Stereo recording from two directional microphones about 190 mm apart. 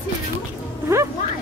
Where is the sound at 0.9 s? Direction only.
15° right (ahead or behind).